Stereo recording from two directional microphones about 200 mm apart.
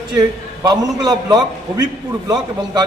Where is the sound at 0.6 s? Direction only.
20° right (ahead or behind).